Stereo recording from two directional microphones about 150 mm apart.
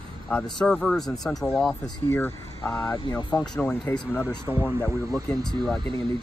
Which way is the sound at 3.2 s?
30° left (ahead or behind).